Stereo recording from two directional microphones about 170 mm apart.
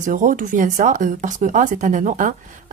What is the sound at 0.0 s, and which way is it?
Speech, 50° right (ahead or behind).